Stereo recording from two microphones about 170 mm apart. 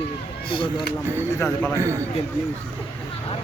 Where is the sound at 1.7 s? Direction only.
15° right (ahead or behind).